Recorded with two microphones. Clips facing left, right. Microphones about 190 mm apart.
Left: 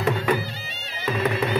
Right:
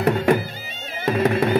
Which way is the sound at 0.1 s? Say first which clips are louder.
Right 4 dB; 45° right (ahead or behind).